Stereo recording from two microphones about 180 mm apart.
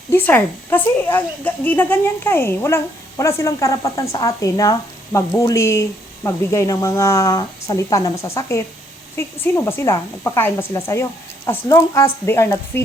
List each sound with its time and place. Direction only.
0.1 s a woman's voice: 10° left (ahead or behind)